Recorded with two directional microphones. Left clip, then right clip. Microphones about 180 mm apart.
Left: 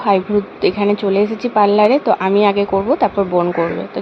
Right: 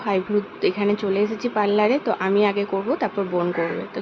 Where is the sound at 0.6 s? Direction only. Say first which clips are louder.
Left 7 dB; 20° left (ahead or behind).